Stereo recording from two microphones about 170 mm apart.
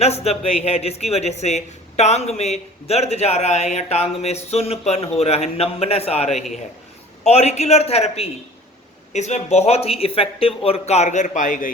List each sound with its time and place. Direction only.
0.0 s speech: 40° left (ahead or behind)